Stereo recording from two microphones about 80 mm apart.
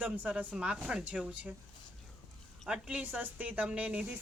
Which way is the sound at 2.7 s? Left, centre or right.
Centre.